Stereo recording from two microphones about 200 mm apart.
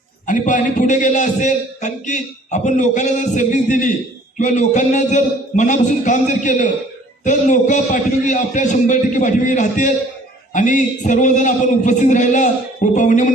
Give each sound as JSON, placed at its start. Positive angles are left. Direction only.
{"t": 0.3, "sound": "a man's voice", "side_deg": 40}